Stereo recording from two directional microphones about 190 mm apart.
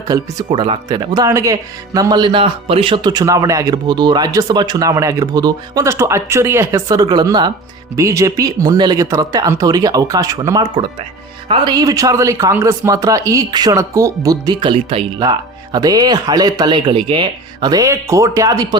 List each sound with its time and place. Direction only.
0.1 s speech: 20° right (ahead or behind)